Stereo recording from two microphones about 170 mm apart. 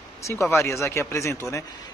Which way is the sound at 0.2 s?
15° left (ahead or behind).